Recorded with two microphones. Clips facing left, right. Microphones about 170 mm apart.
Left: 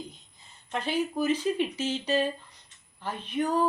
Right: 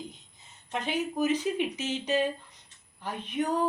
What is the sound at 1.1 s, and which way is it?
Speech, 15° right (ahead or behind).